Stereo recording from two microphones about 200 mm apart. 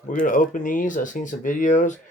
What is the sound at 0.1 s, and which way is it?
Speech, 40° left (ahead or behind).